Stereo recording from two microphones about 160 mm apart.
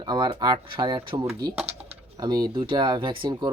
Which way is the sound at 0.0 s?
25° right (ahead or behind).